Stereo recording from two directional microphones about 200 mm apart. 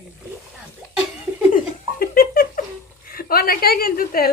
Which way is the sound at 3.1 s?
50° left (ahead or behind).